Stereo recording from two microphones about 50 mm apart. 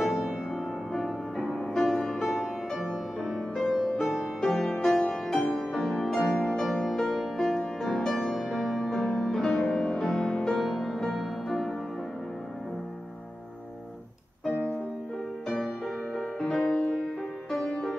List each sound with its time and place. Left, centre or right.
0.0 s music: centre
0.3 s music: centre
0.9 s music: centre
1.4 s music: centre
1.8 s music: centre
15.4 s music: centre